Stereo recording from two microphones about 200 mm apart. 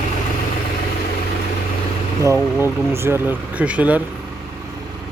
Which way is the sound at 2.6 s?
10° right (ahead or behind).